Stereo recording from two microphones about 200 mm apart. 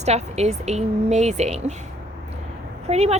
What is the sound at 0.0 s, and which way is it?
A woman's voice, 35° right (ahead or behind).